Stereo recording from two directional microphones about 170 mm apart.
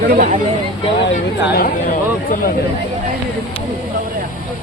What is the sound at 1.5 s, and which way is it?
Speech, 65° left (ahead or behind).